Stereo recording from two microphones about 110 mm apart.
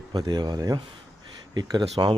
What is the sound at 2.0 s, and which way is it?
Speech, 40° right (ahead or behind).